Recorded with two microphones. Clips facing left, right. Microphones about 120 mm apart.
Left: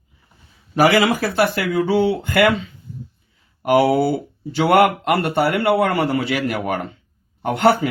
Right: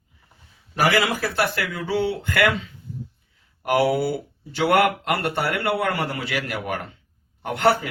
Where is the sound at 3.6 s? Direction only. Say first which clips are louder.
Left 5 dB; 20° left (ahead or behind).